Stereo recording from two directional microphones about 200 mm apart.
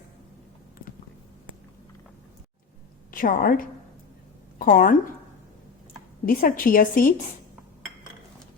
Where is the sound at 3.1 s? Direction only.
45° left (ahead or behind).